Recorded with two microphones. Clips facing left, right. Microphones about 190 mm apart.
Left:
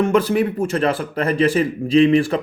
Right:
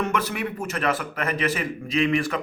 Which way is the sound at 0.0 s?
30° left (ahead or behind).